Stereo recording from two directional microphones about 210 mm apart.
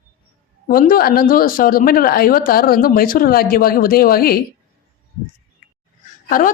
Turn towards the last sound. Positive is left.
turn(degrees=40)  # may be behind; listen again after turning